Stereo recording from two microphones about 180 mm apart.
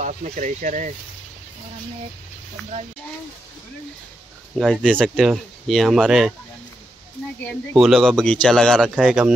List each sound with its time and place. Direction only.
0.0 s speech: 45° right (ahead or behind)
4.6 s speech: centre (ahead or behind)
7.7 s speech: centre (ahead or behind)